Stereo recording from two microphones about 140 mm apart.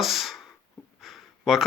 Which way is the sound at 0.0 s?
Centre (ahead or behind).